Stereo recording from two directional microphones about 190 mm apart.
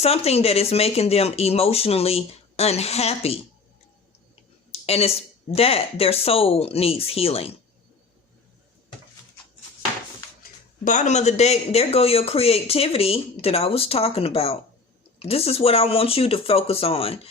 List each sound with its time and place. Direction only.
0.0 s a man's voice: 35° left (ahead or behind)
4.7 s a sound: 30° left (ahead or behind)
5.5 s a man's voice: 30° left (ahead or behind)
10.8 s a man's voice: 40° left (ahead or behind)